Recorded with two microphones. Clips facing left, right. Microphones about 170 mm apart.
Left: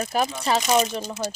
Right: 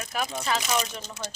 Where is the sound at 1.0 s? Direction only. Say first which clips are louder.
Left 8 dB; 10° left (ahead or behind).